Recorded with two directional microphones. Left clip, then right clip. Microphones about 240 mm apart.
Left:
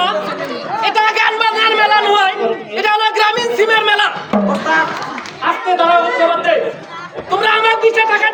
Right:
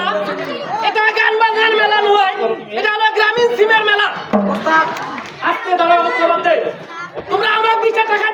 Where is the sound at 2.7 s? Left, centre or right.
Left.